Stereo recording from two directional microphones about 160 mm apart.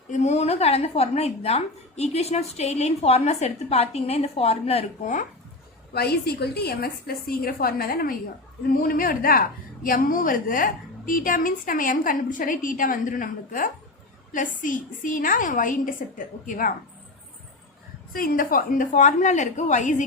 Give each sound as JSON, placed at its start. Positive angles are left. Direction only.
{"t": 0.1, "sound": "speech", "side_deg": 45}
{"t": 5.9, "sound": "a woman's voice", "side_deg": 80}
{"t": 18.1, "sound": "a woman's voice", "side_deg": 60}